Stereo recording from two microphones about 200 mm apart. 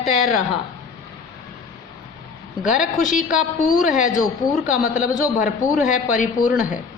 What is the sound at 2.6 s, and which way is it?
Speech, 5° right (ahead or behind).